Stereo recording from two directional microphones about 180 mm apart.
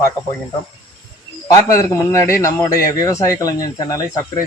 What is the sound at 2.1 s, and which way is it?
Speech, 15° left (ahead or behind).